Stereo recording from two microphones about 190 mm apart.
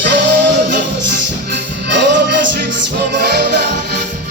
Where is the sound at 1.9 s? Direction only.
65° right (ahead or behind).